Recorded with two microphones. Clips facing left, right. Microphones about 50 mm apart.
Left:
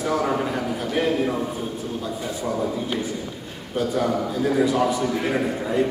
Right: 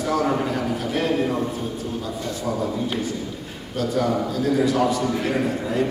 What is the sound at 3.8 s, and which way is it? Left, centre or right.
A man's voice, centre.